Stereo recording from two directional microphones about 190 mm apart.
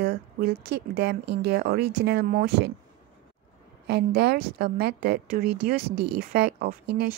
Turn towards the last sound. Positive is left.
turn(degrees=-55)  # may be behind; listen again after turning